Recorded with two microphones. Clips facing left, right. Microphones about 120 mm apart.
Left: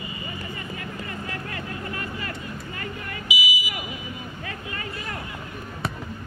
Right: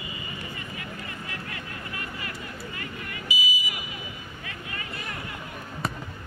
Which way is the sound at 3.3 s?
90° left.